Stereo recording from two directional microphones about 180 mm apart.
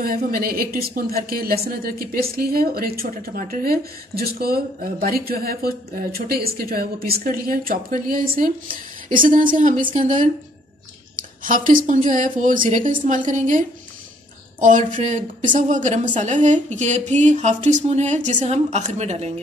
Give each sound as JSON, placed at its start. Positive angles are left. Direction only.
{"t": 0.0, "sound": "a woman's voice", "side_deg": -55}
{"t": 11.1, "sound": "a sound", "side_deg": -50}
{"t": 11.8, "sound": "a woman's voice", "side_deg": -45}